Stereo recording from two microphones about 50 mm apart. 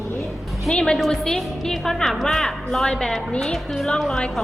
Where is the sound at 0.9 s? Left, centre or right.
Centre.